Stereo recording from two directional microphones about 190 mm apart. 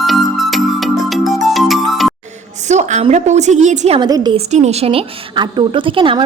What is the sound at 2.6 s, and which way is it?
A woman's voice, 35° right (ahead or behind).